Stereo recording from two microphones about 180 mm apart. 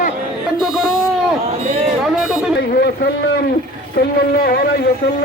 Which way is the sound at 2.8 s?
65° left (ahead or behind).